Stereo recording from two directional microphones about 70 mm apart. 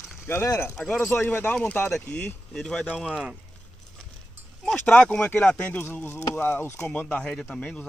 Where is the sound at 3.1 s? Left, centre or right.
Centre.